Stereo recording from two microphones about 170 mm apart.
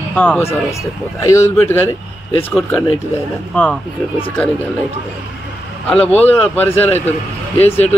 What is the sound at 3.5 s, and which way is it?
Speech, 10° left (ahead or behind).